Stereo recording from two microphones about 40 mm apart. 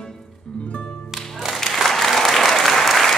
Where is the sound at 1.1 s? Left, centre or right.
Centre.